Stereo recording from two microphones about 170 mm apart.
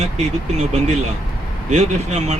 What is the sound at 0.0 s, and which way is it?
Speech, 40° right (ahead or behind).